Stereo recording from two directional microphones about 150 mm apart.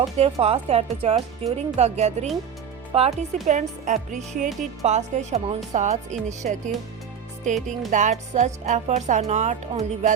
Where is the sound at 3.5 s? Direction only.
55° right (ahead or behind).